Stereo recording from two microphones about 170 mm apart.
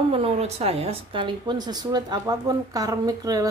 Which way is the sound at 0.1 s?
35° right (ahead or behind).